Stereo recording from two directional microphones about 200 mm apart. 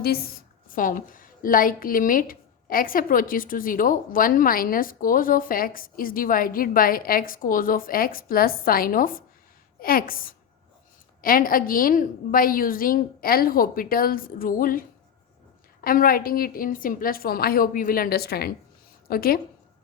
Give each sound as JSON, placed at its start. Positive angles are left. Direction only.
{"t": 0.7, "sound": "a woman's voice", "side_deg": 40}